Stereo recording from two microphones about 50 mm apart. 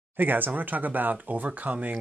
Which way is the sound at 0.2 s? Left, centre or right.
Right.